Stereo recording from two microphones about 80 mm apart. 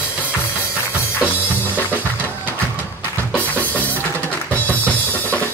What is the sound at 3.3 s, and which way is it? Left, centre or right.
Music, centre.